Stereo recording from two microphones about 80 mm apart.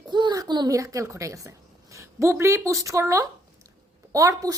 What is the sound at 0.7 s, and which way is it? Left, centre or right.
A woman's voice, right.